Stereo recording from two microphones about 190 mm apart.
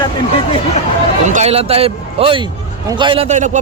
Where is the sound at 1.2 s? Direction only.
35° right (ahead or behind).